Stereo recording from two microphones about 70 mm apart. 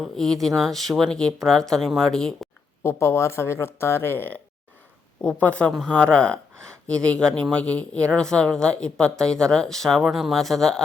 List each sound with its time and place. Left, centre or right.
0.0 s speech: centre
2.8 s speech: left
5.2 s speech: centre